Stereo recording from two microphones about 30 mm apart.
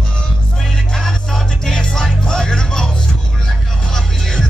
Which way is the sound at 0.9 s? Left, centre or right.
Centre.